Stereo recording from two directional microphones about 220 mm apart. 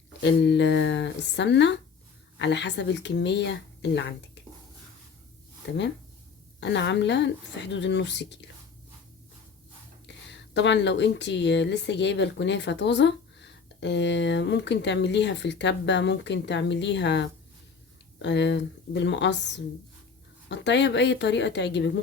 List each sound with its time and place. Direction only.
0.2 s speech: 55° left (ahead or behind)
5.6 s speech: 55° left (ahead or behind)
10.1 s speech: 55° left (ahead or behind)